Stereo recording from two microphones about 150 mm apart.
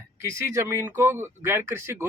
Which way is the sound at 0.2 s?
20° right (ahead or behind).